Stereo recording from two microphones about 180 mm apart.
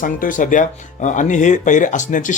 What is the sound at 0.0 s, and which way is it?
Speech, 50° left (ahead or behind).